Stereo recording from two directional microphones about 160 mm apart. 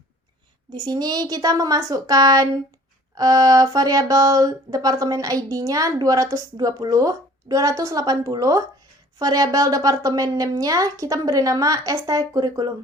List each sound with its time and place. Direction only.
0.7 s speech: 25° right (ahead or behind)